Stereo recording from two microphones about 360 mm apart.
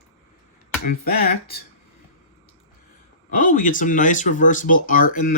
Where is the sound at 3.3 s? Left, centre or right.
Left.